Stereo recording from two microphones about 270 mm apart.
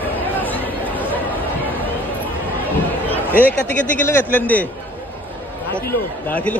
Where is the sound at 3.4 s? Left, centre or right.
Centre.